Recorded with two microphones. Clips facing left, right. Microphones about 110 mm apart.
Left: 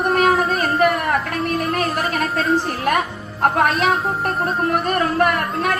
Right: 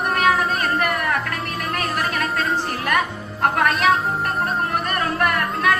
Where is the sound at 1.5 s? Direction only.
35° left (ahead or behind).